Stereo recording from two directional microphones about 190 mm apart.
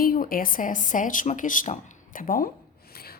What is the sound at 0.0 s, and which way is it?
A woman's voice, 50° left (ahead or behind).